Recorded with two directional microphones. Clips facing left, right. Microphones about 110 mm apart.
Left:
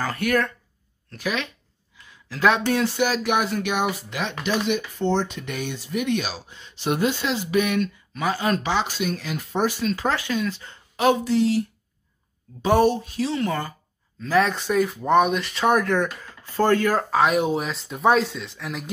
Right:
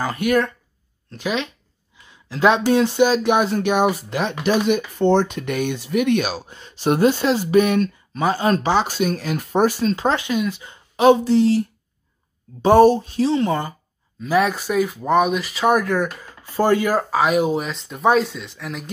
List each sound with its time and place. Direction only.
0.0 s speech: 15° right (ahead or behind)
2.0 s a sound: 20° right (ahead or behind)
2.7 s speech: 20° right (ahead or behind); by 9.9 s 40° right (ahead or behind)
9.9 s speech: 20° right (ahead or behind)
11.1 s speech: 30° right (ahead or behind)
12.6 s speech: 35° right (ahead or behind)
14.2 s speech: 10° right (ahead or behind)